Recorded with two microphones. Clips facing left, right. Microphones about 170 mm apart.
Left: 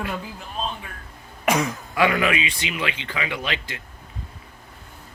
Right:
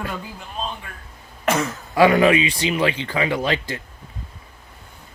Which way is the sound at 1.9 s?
35° right (ahead or behind).